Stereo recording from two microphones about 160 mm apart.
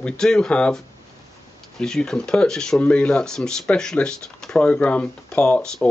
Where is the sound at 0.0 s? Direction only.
5° left (ahead or behind).